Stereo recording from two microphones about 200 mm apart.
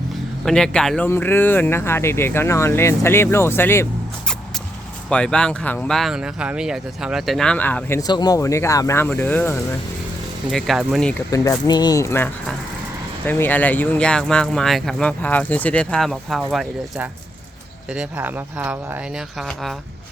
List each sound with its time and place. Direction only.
0.4 s speech: 5° left (ahead or behind)
5.0 s speech: 5° left (ahead or behind)
10.5 s speech: centre (ahead or behind)
11.3 s speech: 15° left (ahead or behind); by 19.7 s centre (ahead or behind)